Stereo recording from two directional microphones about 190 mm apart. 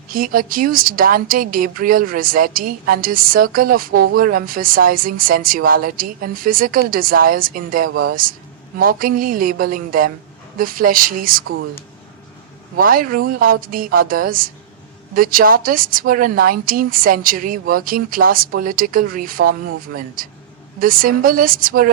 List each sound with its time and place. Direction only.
0.1 s speech: 50° right (ahead or behind)
12.7 s speech: 50° right (ahead or behind)